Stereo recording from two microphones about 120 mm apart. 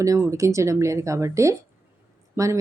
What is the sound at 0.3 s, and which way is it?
Speech, 25° right (ahead or behind).